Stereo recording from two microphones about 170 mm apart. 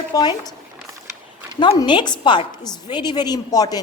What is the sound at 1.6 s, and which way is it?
A woman's voice, 30° left (ahead or behind).